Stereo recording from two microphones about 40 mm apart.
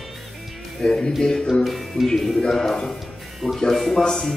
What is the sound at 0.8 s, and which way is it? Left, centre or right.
Speech, centre.